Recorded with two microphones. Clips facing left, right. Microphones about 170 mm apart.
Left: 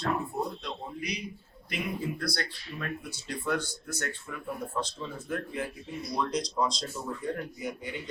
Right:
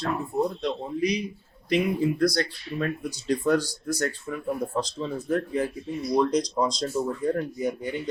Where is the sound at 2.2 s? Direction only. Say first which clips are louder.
Right 11 dB; 35° right (ahead or behind).